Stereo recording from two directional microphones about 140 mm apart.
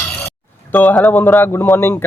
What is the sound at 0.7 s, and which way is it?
Speech, 10° left (ahead or behind).